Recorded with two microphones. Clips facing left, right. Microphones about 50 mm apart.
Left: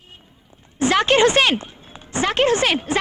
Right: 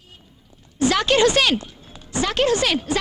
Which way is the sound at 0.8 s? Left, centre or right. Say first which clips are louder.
Left 2 dB; left.